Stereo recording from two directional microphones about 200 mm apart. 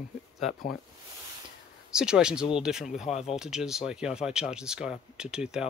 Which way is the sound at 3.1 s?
30° left (ahead or behind).